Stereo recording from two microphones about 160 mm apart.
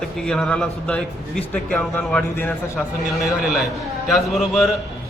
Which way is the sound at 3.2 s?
Centre (ahead or behind).